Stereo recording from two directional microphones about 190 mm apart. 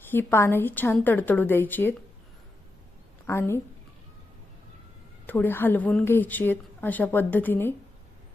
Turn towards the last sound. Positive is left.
turn(degrees=10)  # may be behind; listen again after turning